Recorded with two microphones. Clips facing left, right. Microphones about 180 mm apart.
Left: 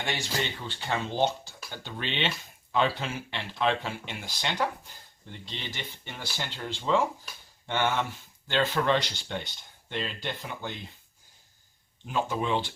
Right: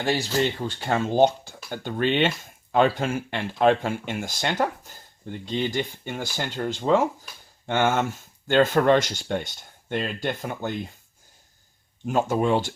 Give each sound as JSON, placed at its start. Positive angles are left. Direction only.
{"t": 0.0, "sound": "speech", "side_deg": -35}
{"t": 12.0, "sound": "speech", "side_deg": -45}